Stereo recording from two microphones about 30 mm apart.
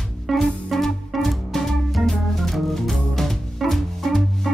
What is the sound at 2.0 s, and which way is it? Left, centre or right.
Music, centre.